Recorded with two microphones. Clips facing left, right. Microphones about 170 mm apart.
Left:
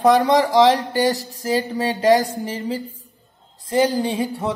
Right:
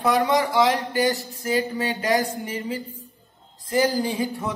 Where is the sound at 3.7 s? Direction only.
20° left (ahead or behind).